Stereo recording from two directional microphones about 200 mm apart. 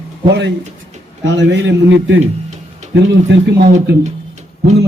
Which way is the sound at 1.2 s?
60° right (ahead or behind).